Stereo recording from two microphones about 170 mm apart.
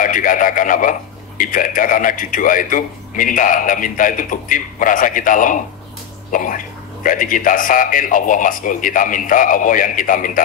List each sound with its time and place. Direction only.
0.0 s a man's voice: 50° left (ahead or behind)